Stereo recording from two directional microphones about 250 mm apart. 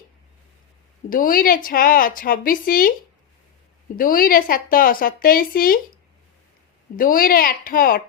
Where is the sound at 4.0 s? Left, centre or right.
Left.